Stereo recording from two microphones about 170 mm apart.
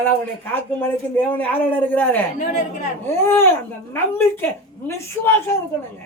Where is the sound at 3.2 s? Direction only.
15° left (ahead or behind).